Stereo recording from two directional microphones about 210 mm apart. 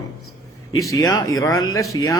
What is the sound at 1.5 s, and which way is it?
Speech, 75° left (ahead or behind).